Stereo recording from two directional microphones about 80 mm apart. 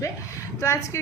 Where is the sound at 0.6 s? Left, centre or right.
Left.